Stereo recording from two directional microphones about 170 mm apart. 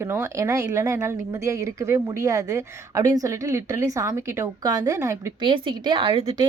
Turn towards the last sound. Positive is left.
turn(degrees=-30)  # may be behind; listen again after turning